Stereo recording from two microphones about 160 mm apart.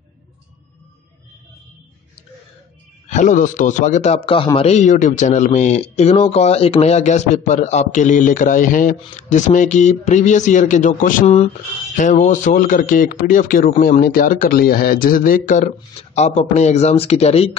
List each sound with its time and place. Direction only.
3.1 s speech: 50° left (ahead or behind)